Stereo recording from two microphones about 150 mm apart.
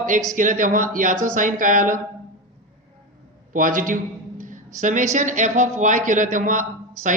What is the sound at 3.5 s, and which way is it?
A woman's voice, 60° right (ahead or behind).